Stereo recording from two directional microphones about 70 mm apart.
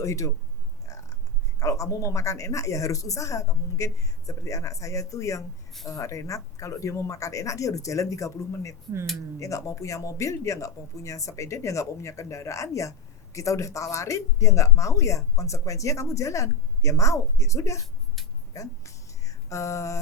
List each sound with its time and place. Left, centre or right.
0.0 s speech: left
1.5 s speech: left
18.5 s a sound: left